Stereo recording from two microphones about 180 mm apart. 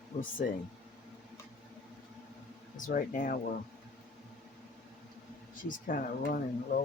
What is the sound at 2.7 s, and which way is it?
Speech, 45° left (ahead or behind).